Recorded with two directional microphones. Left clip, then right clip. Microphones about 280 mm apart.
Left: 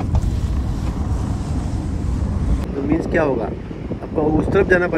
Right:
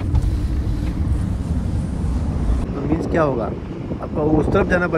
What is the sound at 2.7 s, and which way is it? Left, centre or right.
Speech, centre.